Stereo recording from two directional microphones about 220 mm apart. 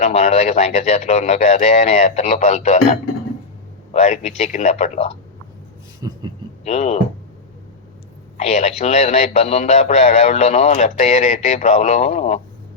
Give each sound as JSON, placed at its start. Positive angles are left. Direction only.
{"t": 0.0, "sound": "speech", "side_deg": 30}
{"t": 6.0, "sound": "a sound", "side_deg": -20}
{"t": 6.7, "sound": "speech", "side_deg": 30}
{"t": 8.4, "sound": "speech", "side_deg": 30}